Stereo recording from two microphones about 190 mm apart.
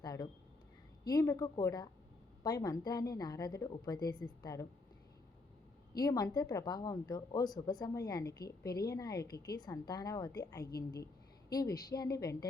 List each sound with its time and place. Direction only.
0.0 s a sound: 20° left (ahead or behind)
1.0 s speech: 15° left (ahead or behind)
5.9 s a woman's voice: 20° left (ahead or behind)